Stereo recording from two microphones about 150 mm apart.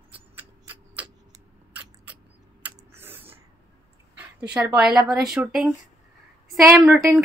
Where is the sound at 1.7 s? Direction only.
10° right (ahead or behind).